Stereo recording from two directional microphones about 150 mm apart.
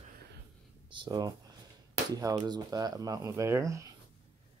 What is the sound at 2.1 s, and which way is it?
Speech, 25° right (ahead or behind).